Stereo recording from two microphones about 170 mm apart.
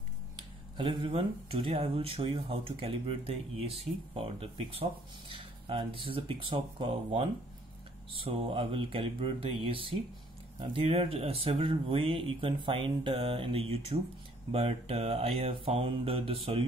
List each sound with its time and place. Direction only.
0.4 s speech: 30° right (ahead or behind)